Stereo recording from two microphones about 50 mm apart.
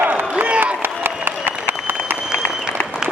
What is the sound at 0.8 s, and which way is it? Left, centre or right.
Applause, right.